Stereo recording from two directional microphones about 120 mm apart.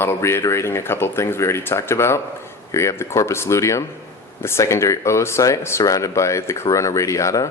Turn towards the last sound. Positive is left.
turn(degrees=25)  # may be behind; listen again after turning